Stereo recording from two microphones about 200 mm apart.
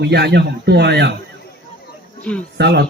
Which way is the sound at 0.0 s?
55° right (ahead or behind).